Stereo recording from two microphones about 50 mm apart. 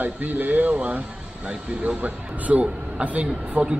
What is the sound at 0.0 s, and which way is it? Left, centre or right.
A man's voice, right.